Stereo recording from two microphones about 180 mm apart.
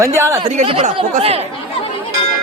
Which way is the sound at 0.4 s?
35° right (ahead or behind).